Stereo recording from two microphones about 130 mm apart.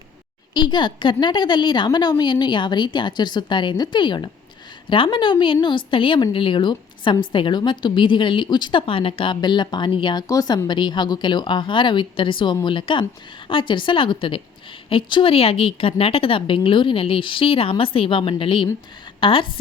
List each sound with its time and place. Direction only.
0.5 s a woman's voice: 35° left (ahead or behind)